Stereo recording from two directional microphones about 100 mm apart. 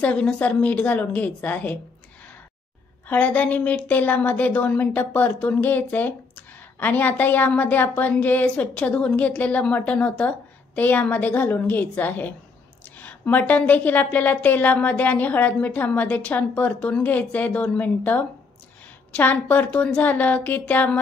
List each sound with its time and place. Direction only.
0.0 s a woman's voice: 10° left (ahead or behind)
3.1 s a woman's voice: 15° left (ahead or behind)